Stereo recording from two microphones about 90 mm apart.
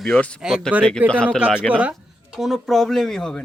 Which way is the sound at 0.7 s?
15° right (ahead or behind).